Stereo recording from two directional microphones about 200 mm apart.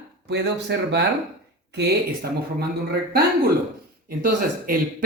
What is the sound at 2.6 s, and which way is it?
Speech, 50° right (ahead or behind).